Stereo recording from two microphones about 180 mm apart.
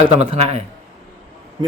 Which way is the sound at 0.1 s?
35° right (ahead or behind).